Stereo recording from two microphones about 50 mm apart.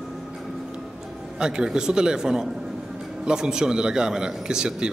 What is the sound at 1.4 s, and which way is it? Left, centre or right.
Speech, centre.